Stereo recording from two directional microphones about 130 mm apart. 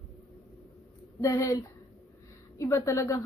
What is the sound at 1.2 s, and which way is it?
A woman's voice, 25° left (ahead or behind).